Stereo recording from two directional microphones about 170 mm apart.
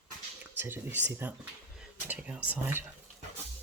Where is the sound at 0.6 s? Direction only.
10° right (ahead or behind).